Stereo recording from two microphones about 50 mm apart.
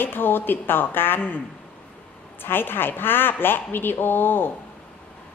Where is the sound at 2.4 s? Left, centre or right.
Left.